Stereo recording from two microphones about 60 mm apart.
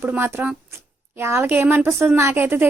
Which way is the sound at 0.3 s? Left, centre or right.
Right.